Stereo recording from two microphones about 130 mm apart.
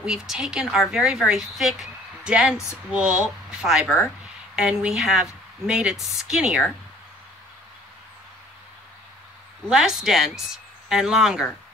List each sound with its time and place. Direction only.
0.0 s speech: 5° right (ahead or behind)
9.7 s speech: 5° right (ahead or behind)